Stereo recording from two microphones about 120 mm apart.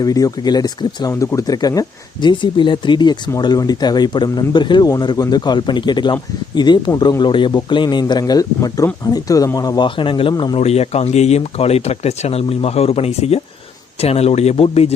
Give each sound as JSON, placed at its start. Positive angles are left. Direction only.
{"t": 0.0, "sound": "speech", "side_deg": 30}
{"t": 10.6, "sound": "speech", "side_deg": 60}